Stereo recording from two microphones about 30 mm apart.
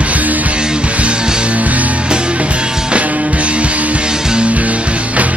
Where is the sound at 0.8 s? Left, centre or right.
Right.